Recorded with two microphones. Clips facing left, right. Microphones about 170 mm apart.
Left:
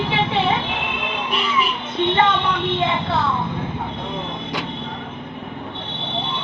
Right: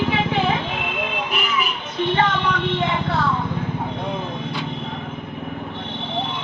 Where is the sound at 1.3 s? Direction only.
30° left (ahead or behind).